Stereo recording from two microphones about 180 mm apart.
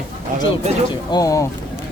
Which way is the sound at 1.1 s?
20° left (ahead or behind).